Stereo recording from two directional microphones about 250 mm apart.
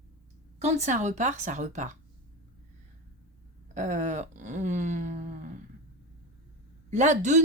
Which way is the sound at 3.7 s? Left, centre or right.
Right.